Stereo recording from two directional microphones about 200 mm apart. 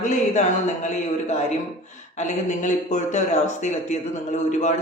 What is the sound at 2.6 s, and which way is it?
Speech, 35° left (ahead or behind).